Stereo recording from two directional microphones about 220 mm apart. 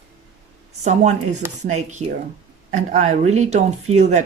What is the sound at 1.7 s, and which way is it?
Speech, 30° right (ahead or behind).